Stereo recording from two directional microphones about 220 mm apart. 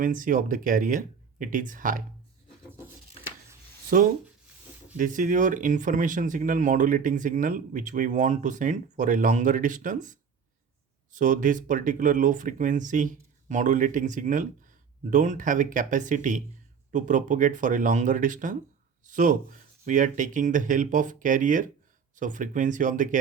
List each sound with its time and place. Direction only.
0.0 s speech: 40° right (ahead or behind)
3.8 s speech: 40° right (ahead or behind)